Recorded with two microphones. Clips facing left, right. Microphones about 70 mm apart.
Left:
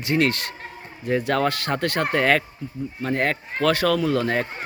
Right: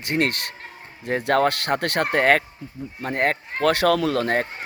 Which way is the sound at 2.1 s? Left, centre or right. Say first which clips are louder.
Right 3 dB; right.